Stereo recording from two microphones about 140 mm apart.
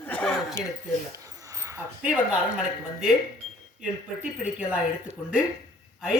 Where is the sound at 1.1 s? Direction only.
25° right (ahead or behind).